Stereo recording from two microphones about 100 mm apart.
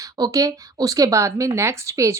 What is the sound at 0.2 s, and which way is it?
A woman's voice, 35° right (ahead or behind).